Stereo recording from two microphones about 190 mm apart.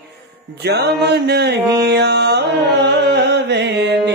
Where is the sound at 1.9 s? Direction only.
60° right (ahead or behind).